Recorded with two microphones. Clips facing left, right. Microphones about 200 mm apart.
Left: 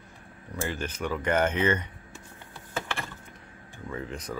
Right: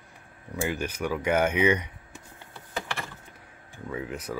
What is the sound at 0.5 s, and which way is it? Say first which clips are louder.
Speech: right 3 dB; 10° right (ahead or behind).